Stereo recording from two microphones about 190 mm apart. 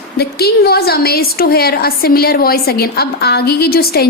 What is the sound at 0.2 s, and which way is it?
A woman's voice, 55° left (ahead or behind).